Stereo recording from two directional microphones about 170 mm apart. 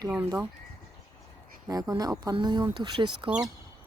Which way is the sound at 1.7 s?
20° right (ahead or behind).